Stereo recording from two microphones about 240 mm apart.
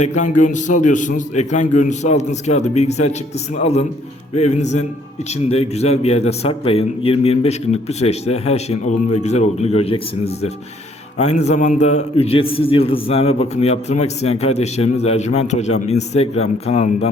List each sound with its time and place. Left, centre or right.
0.0 s a man's voice: left